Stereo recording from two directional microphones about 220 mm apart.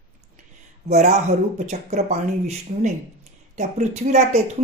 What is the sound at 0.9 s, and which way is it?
Speech, 30° right (ahead or behind).